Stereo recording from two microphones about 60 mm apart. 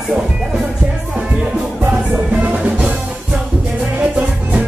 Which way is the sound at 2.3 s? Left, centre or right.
Right.